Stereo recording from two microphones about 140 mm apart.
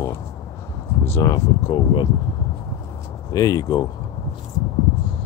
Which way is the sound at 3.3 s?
25° left (ahead or behind).